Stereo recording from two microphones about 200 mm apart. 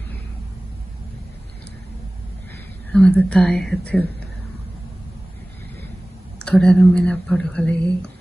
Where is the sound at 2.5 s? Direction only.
5° left (ahead or behind).